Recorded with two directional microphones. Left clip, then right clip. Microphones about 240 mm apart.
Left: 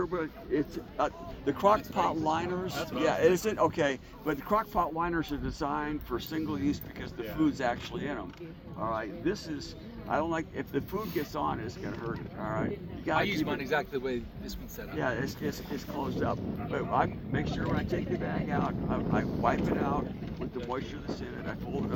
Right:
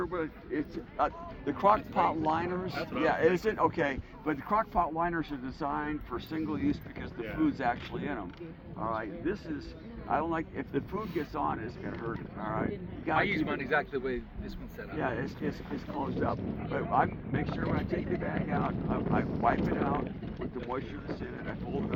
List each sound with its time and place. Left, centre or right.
0.0 s speech: centre
13.1 s a man's voice: left
14.9 s speech: centre